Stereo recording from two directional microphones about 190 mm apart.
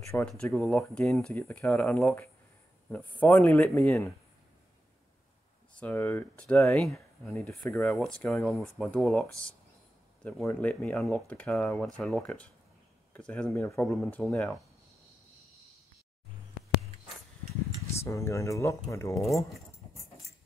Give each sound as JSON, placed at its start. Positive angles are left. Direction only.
{"t": 0.2, "sound": "speech", "side_deg": 5}
{"t": 0.7, "sound": "speech", "side_deg": 0}
{"t": 5.8, "sound": "speech", "side_deg": 10}
{"t": 17.9, "sound": "speech", "side_deg": 15}